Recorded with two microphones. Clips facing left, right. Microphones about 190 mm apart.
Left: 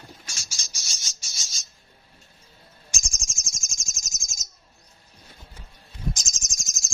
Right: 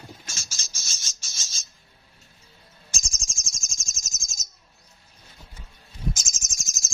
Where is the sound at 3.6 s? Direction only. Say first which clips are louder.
Left 1 dB; 15° left (ahead or behind).